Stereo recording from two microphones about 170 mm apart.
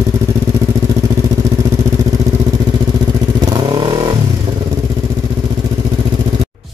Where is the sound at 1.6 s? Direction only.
20° right (ahead or behind).